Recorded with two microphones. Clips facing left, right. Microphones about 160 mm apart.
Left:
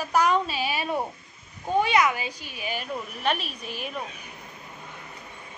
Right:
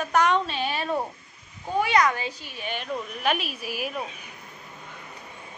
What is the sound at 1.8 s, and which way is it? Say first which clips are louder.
A woman's voice: even; 20° left (ahead or behind).